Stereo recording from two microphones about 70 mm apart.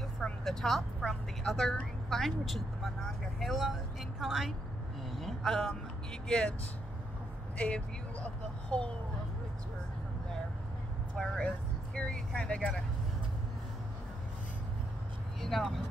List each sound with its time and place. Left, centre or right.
0.2 s a woman's voice: centre
6.2 s speech: centre
8.6 s speech: centre
11.1 s speech: centre
15.4 s a woman's voice: centre